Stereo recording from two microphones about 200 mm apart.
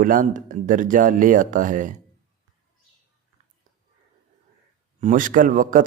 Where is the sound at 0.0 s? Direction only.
40° right (ahead or behind).